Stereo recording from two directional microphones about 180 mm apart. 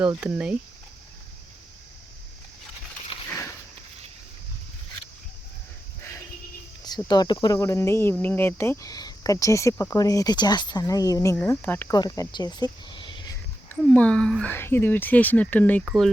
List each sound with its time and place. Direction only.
0.2 s speech: 5° right (ahead or behind)
3.1 s a sound: 25° left (ahead or behind)
6.8 s speech: 20° left (ahead or behind)
13.8 s speech: 5° left (ahead or behind)
15.8 s speech: 5° right (ahead or behind)